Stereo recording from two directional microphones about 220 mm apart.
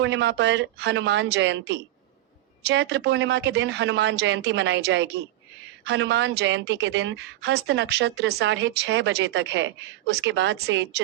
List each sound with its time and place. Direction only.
0.0 s a woman's voice: 55° right (ahead or behind)